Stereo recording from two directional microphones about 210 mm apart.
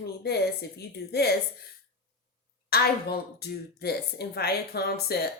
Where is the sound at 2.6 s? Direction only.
50° left (ahead or behind).